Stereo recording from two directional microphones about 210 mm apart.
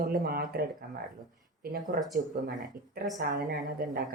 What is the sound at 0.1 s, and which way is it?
Speech, 45° right (ahead or behind).